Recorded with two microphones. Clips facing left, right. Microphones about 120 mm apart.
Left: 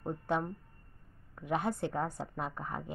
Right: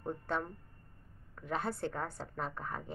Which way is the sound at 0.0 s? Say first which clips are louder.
Left 3 dB; 15° left (ahead or behind).